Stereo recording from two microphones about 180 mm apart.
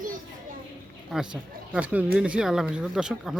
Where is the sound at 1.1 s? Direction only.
5° right (ahead or behind).